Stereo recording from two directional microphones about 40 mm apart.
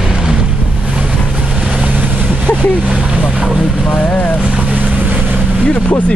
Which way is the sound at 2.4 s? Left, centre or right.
Left.